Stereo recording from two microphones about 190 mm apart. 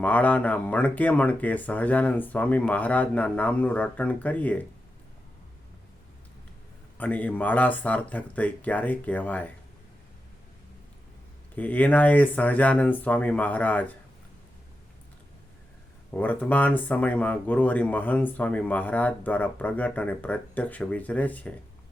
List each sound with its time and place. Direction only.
0.0 s speech: 10° left (ahead or behind)
7.0 s speech: 10° left (ahead or behind)
11.5 s speech: 10° left (ahead or behind)
16.1 s speech: 10° left (ahead or behind)